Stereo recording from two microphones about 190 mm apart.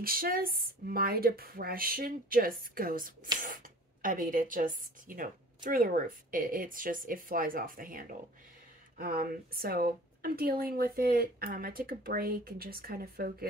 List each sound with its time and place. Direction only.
0.0 s speech: 50° right (ahead or behind)